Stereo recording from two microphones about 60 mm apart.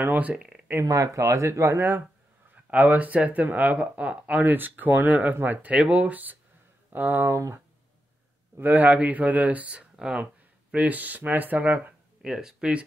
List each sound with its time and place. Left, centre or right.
0.0 s speech: right
0.8 s speech: right
1.8 s speech: right
8.5 s speech: right; by 10.2 s centre
10.7 s speech: right
12.2 s speech: centre